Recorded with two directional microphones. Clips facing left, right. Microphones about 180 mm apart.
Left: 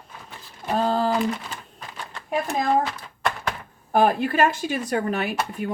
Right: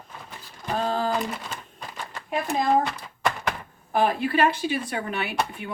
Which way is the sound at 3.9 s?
45° left (ahead or behind).